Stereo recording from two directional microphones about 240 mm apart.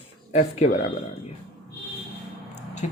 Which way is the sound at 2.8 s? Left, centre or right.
Left.